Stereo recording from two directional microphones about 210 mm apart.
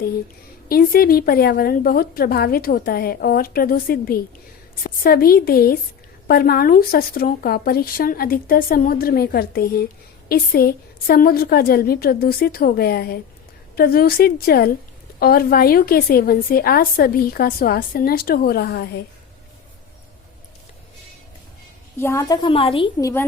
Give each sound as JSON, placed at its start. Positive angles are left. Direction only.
{"t": 0.7, "sound": "a woman's voice", "side_deg": 45}
{"t": 21.9, "sound": "a woman's voice", "side_deg": 10}